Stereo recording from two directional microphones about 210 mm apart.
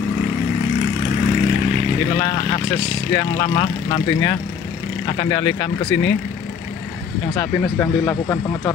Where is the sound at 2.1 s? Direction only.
20° left (ahead or behind).